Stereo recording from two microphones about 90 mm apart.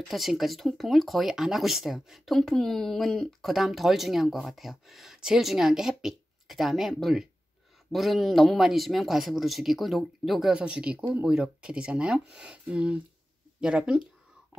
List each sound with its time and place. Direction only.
0.1 s speech: centre (ahead or behind)